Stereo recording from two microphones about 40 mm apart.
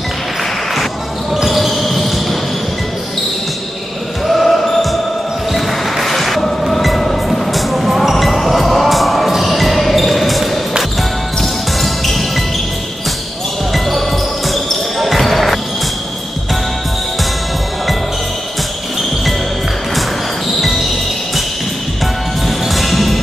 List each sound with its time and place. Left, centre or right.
1.3 s basketball bounce: centre
4.3 s basketball bounce: centre
5.5 s music: centre
13.7 s music: centre
14.5 s basketball bounce: centre
22.5 s music: centre